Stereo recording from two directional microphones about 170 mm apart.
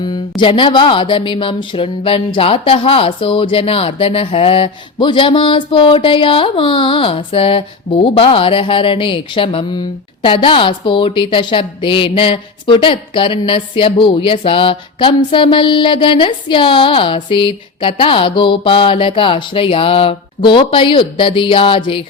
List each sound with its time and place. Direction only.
0.0 s a woman's voice: 25° left (ahead or behind)